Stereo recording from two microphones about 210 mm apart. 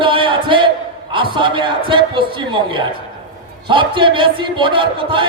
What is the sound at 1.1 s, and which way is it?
A man's voice, 25° right (ahead or behind).